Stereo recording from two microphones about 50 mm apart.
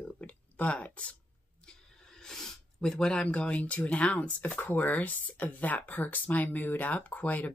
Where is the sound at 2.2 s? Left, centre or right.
Centre.